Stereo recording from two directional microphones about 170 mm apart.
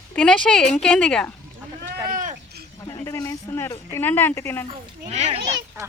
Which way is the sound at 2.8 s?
20° left (ahead or behind).